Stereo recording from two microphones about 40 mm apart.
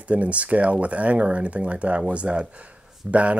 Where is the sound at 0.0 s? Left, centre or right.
Right.